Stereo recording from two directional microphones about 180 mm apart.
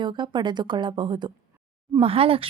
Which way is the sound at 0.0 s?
25° right (ahead or behind).